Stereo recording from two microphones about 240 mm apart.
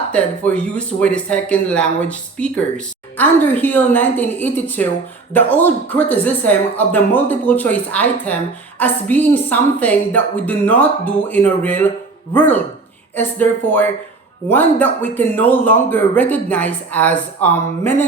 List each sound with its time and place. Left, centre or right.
0.1 s speech: centre